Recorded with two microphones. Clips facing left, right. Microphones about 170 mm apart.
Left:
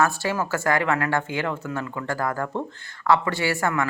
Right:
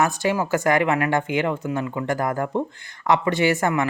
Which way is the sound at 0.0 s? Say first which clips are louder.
Right 2 dB; 15° right (ahead or behind).